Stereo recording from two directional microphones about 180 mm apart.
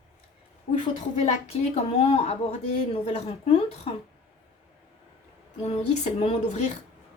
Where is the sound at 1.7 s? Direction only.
35° left (ahead or behind).